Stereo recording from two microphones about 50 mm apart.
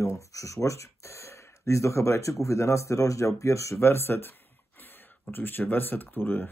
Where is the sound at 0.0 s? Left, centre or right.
Left.